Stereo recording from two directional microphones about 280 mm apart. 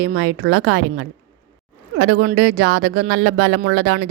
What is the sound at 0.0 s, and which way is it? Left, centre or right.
A woman's voice, right.